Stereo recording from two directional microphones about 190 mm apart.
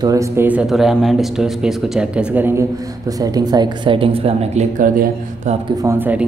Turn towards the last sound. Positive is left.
turn(degrees=-10)  # may be behind; listen again after turning